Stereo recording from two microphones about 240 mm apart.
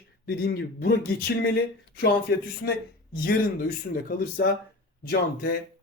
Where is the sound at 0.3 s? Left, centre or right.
Left.